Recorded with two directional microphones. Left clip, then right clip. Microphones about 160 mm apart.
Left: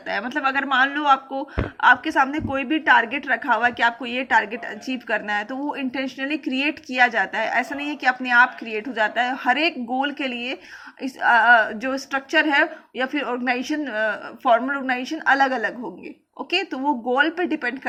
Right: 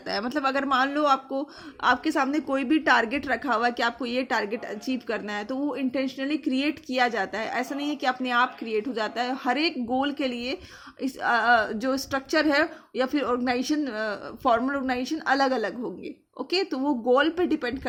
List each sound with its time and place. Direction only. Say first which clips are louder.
0.1 s a woman's voice: left 3 dB; 50° right (ahead or behind)